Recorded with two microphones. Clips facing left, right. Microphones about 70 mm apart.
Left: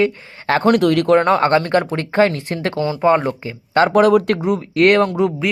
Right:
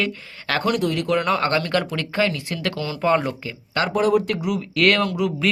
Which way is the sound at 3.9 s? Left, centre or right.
Left.